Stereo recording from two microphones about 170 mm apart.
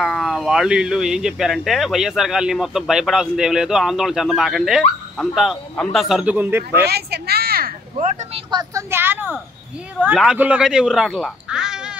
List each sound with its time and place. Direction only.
0.0 s speech: centre (ahead or behind)
6.8 s a sound: 70° right (ahead or behind)
8.5 s a woman's voice: 25° right (ahead or behind)
8.9 s speech: 10° right (ahead or behind)